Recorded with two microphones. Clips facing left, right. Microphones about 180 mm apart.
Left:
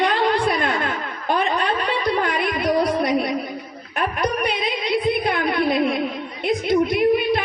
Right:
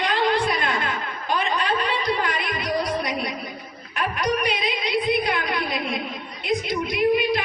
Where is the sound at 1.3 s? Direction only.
55° left (ahead or behind).